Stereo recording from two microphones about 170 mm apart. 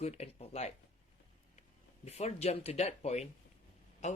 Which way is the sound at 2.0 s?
40° left (ahead or behind).